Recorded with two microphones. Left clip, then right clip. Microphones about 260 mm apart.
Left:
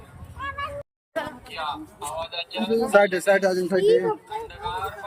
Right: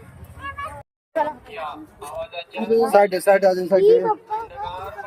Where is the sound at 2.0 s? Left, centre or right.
Left.